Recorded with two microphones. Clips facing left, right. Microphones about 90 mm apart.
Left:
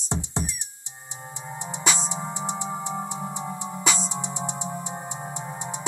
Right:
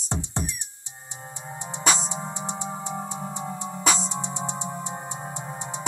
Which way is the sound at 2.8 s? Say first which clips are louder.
Left 1 dB; 20° left (ahead or behind).